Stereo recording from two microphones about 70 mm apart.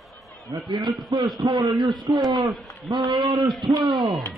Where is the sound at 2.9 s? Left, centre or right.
Right.